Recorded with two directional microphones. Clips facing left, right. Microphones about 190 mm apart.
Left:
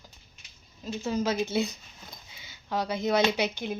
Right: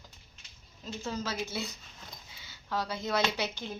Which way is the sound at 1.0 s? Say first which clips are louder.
Left 8 dB; 15° left (ahead or behind).